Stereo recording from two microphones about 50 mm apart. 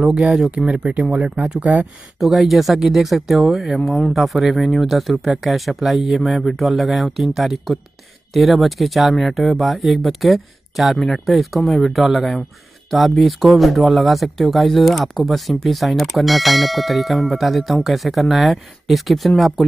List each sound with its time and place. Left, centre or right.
0.0 s speech: right
2.1 s speech: centre